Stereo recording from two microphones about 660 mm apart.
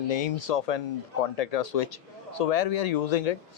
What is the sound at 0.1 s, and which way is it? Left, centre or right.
Speech, left.